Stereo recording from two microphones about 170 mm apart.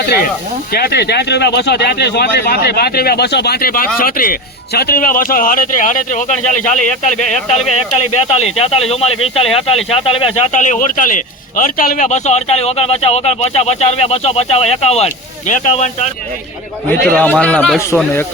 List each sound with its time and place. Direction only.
0.7 s speech: 65° left (ahead or behind); by 16.0 s 45° left (ahead or behind)
17.2 s a man's voice: 10° left (ahead or behind)